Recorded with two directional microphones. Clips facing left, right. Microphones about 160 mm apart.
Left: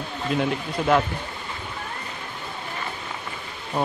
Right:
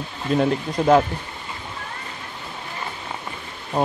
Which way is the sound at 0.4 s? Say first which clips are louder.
Right 6 dB; 35° right (ahead or behind).